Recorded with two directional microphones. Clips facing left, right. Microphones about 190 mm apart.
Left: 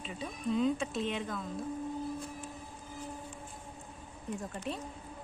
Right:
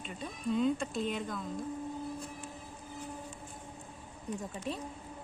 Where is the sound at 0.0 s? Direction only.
Centre (ahead or behind).